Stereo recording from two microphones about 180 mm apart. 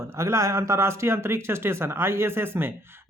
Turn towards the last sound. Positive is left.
turn(degrees=-15)  # may be behind; listen again after turning